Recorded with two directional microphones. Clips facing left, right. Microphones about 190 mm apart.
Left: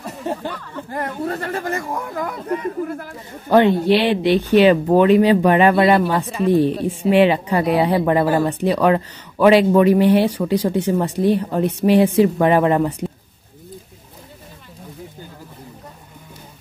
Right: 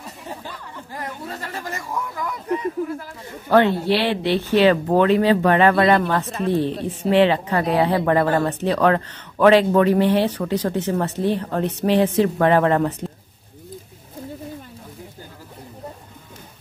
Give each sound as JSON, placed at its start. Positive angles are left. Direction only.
{"t": 0.3, "sound": "speech", "side_deg": 60}
{"t": 3.4, "sound": "speech", "side_deg": 15}